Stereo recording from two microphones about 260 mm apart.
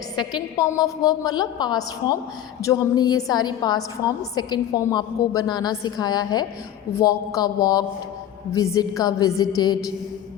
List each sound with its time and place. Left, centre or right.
0.2 s a woman's voice: centre